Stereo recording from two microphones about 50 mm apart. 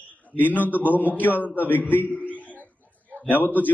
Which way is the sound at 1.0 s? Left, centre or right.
Left.